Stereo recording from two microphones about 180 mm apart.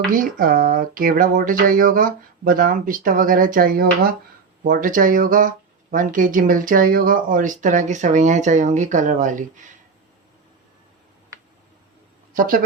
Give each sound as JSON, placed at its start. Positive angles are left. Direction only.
{"t": 0.1, "sound": "speech", "side_deg": -50}
{"t": 12.3, "sound": "speech", "side_deg": -50}